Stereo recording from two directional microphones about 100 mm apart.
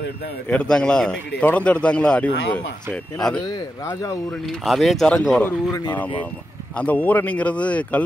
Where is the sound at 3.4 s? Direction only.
45° left (ahead or behind).